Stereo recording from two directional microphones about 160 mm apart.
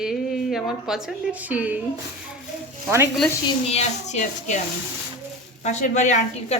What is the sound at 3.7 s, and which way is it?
Speech, 45° left (ahead or behind).